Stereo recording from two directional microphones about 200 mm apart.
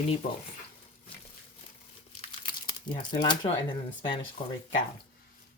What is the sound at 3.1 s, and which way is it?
Speech, 20° left (ahead or behind).